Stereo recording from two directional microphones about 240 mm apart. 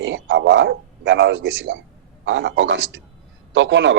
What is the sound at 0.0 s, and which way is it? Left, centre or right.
A man's voice, right.